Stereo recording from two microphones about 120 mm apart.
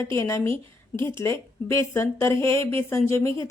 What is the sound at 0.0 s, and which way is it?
A woman's voice, 25° left (ahead or behind).